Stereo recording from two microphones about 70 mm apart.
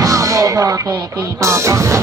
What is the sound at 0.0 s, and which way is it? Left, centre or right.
Music, right.